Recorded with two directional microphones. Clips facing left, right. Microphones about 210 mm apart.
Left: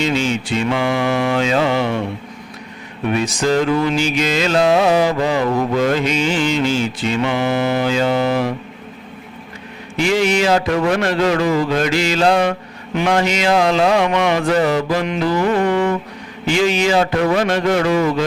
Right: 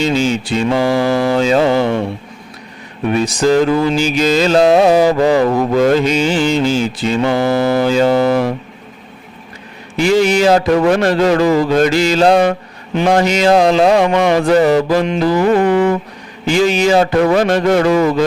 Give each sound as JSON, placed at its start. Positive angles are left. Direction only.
{"t": 0.0, "sound": "music", "side_deg": -35}
{"t": 3.2, "sound": "music", "side_deg": -35}
{"t": 10.0, "sound": "music", "side_deg": -40}
{"t": 16.5, "sound": "music", "side_deg": -40}